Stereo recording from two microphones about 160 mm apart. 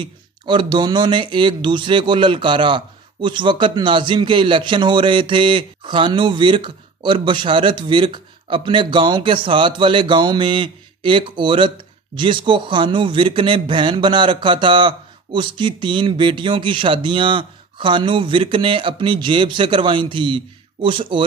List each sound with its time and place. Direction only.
0.0 s speech: 30° right (ahead or behind)